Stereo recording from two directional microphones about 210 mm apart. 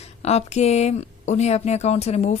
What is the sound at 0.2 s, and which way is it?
Speech, 30° left (ahead or behind).